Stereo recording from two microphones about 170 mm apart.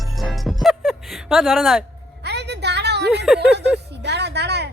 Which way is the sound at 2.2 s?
80° right.